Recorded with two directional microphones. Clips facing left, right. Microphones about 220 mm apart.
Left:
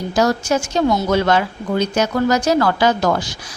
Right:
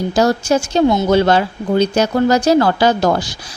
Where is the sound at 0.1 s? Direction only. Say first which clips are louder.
Right 2 dB; 30° right (ahead or behind).